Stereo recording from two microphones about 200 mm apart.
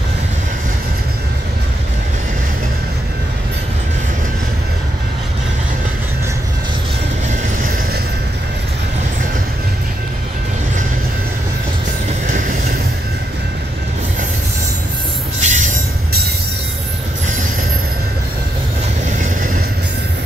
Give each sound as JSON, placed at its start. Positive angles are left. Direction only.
{"t": 15.4, "sound": "music", "side_deg": -40}